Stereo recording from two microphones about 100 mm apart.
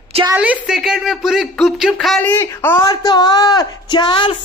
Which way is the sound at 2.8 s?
40° left (ahead or behind).